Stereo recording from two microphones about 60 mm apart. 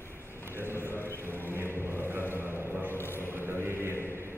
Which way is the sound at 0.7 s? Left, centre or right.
Left.